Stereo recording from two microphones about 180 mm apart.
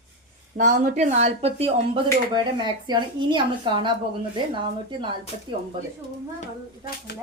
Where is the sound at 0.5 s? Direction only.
45° right (ahead or behind); by 5.2 s 25° right (ahead or behind).